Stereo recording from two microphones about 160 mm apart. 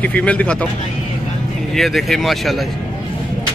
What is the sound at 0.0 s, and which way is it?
Speech, 10° left (ahead or behind).